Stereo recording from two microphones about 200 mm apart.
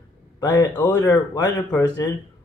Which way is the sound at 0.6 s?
10° left (ahead or behind).